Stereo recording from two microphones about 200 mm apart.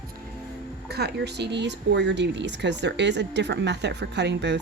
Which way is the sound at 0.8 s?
55° right (ahead or behind).